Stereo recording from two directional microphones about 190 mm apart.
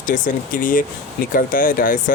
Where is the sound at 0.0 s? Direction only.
45° left (ahead or behind).